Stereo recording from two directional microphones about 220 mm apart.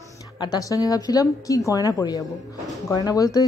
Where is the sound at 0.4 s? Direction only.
15° left (ahead or behind).